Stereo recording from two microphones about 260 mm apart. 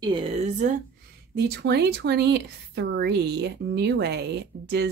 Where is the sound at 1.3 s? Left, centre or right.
Right.